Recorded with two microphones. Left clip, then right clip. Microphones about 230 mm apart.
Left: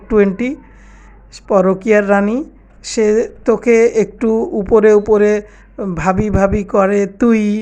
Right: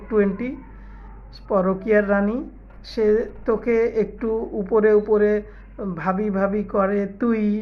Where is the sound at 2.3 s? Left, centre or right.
Left.